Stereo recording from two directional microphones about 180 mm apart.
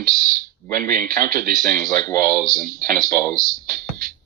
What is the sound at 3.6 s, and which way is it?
Music, 50° right (ahead or behind).